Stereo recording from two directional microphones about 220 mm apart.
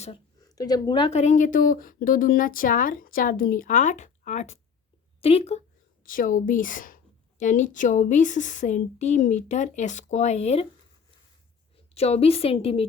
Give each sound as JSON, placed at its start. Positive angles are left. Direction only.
{"t": 0.3, "sound": "a woman's voice", "side_deg": 15}
{"t": 6.1, "sound": "a woman's voice", "side_deg": 40}
{"t": 11.9, "sound": "a woman's voice", "side_deg": 30}